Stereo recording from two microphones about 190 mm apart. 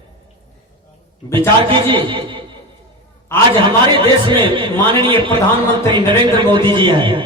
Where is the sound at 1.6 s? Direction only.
25° right (ahead or behind).